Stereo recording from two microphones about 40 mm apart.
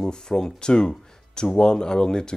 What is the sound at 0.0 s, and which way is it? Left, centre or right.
Speech, centre.